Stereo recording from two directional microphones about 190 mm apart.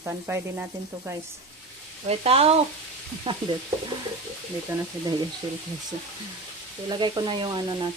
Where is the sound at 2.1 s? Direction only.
30° right (ahead or behind).